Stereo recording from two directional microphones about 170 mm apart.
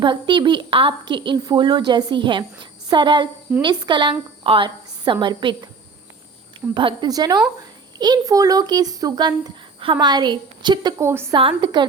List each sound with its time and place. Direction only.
0.0 s a child's voice: 30° right (ahead or behind)
6.7 s a child's voice: 25° right (ahead or behind)
11.3 s a child's voice: 30° right (ahead or behind)